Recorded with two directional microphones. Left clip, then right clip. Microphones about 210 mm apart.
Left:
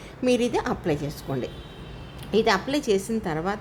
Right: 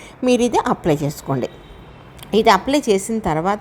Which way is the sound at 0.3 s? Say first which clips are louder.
Right 7 dB; 20° right (ahead or behind).